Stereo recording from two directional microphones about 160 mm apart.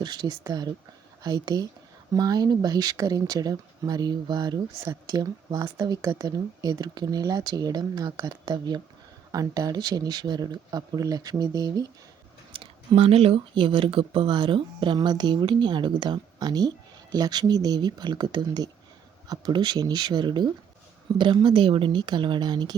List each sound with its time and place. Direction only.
0.0 s speech: 25° right (ahead or behind)